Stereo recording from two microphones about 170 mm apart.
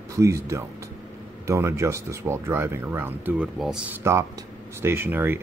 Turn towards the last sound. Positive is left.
turn(degrees=-10)  # may be behind; listen again after turning